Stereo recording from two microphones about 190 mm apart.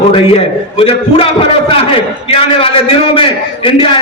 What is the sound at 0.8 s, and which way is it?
A man's voice, 30° left (ahead or behind).